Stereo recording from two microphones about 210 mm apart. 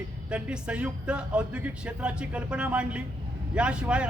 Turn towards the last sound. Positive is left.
turn(degrees=-5)  # may be behind; listen again after turning